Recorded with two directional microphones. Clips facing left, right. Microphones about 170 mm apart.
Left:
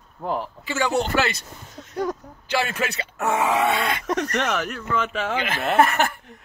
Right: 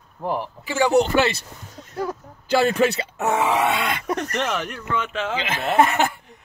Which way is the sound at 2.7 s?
30° right (ahead or behind).